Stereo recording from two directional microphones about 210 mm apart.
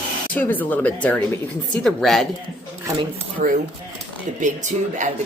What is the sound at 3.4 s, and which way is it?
Speech, 40° right (ahead or behind).